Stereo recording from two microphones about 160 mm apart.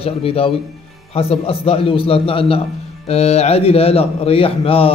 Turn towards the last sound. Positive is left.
turn(degrees=35)  # may be behind; listen again after turning